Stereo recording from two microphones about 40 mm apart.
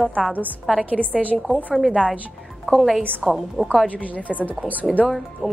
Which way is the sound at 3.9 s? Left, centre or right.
Left.